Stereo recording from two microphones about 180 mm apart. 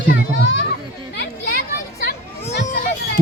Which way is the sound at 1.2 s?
70° left (ahead or behind).